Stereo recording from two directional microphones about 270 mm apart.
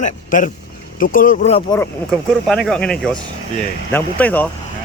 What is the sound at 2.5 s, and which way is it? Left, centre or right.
Speech, centre.